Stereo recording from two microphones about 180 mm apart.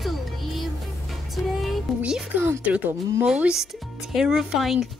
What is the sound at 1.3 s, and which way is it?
Speech, centre (ahead or behind).